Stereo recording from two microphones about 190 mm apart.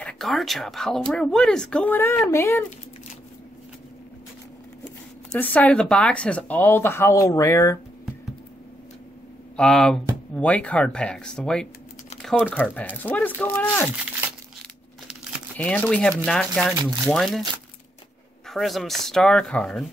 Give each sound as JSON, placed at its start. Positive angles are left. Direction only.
{"t": 0.0, "sound": "speech", "side_deg": 0}
{"t": 5.3, "sound": "speech", "side_deg": 10}
{"t": 9.6, "sound": "speech", "side_deg": 5}
{"t": 15.5, "sound": "speech", "side_deg": 5}
{"t": 18.5, "sound": "speech", "side_deg": 0}